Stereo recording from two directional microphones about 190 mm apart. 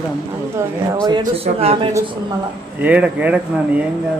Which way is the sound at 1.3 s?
30° right (ahead or behind).